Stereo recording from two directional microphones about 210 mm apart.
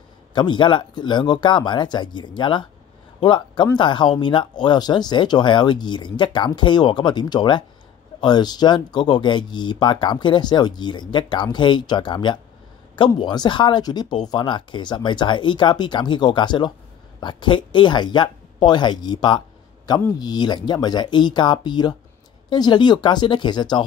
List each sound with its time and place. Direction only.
0.3 s speech: 20° left (ahead or behind)